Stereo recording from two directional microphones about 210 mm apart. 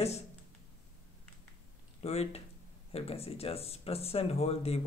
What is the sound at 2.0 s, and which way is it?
Speech, 30° left (ahead or behind).